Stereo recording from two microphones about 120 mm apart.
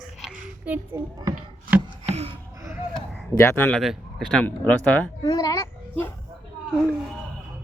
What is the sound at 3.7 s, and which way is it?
Speech, centre (ahead or behind).